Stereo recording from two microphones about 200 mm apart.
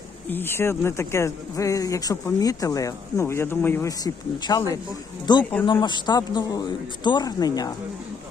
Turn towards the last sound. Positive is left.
turn(degrees=20)  # may be behind; listen again after turning